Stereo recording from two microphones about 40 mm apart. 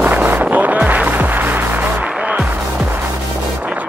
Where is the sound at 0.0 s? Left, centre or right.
Right.